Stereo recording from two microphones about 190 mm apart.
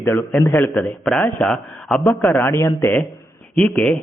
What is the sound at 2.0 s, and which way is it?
A man's voice, 10° left (ahead or behind).